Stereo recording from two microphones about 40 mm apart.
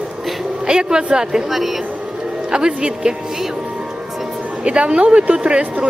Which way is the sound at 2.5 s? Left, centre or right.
Right.